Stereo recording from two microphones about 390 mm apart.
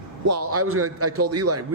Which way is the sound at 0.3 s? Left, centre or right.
Right.